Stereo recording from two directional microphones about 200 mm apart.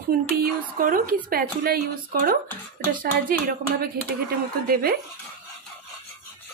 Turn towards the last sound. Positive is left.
turn(degrees=-50)  # may be behind; listen again after turning